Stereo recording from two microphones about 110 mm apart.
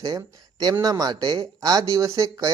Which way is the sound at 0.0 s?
35° right (ahead or behind).